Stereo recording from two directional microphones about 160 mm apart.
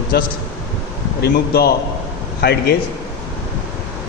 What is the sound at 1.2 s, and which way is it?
A man's voice, 90° left.